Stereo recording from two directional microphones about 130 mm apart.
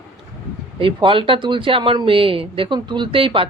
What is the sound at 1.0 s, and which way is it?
Speech, 40° right (ahead or behind).